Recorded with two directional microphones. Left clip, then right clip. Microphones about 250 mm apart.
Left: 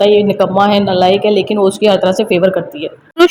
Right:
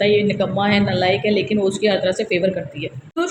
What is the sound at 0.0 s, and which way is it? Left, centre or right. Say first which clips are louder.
A woman's voice: left 7 dB; left.